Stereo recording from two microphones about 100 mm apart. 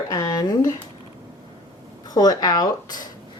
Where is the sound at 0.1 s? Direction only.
35° left (ahead or behind).